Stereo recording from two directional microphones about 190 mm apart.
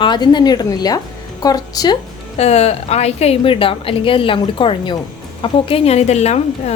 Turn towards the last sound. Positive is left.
turn(degrees=35)  # may be behind; listen again after turning